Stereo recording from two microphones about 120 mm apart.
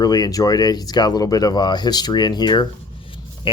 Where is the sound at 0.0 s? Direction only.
30° left (ahead or behind).